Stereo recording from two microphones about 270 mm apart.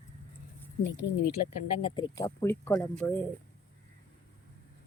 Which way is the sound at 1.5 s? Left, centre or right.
Centre.